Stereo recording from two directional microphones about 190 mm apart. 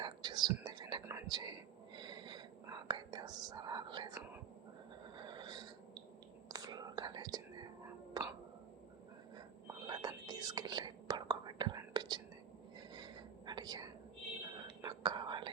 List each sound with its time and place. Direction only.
0.0 s whispering: 25° right (ahead or behind)
5.1 s a sound: 25° right (ahead or behind)
6.5 s whispering: 20° right (ahead or behind)
9.6 s whispering: 20° right (ahead or behind)